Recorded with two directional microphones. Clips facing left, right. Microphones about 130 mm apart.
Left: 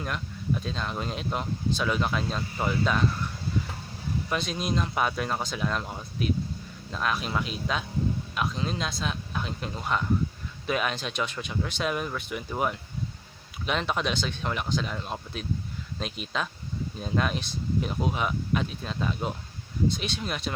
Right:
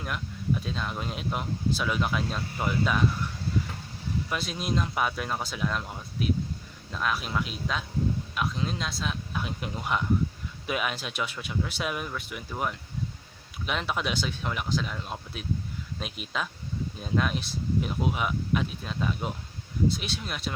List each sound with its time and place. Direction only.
0.6 s speech: 5° right (ahead or behind)
4.3 s speech: 5° right (ahead or behind)